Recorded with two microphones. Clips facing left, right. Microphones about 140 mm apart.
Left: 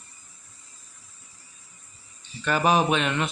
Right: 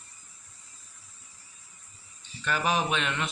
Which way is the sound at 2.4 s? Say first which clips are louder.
Left 6 dB; 55° left (ahead or behind).